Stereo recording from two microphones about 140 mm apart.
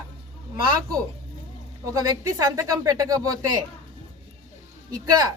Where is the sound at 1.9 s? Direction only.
25° right (ahead or behind).